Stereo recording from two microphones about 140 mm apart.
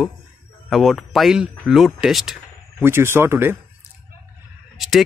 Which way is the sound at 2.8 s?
15° right (ahead or behind).